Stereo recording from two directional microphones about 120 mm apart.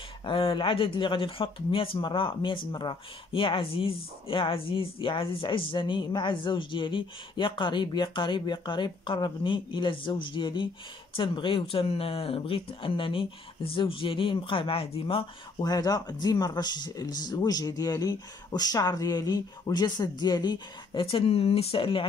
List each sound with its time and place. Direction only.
0.2 s speech: 50° left (ahead or behind)
15.6 s speech: 35° left (ahead or behind)